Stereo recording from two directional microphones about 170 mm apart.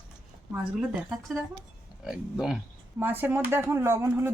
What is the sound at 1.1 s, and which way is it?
Speech, 5° right (ahead or behind).